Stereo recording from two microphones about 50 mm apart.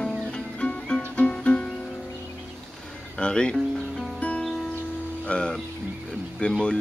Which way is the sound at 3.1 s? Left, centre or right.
Centre.